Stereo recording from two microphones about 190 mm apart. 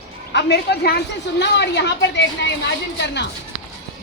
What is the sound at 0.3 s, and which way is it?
A woman's voice, 60° left (ahead or behind).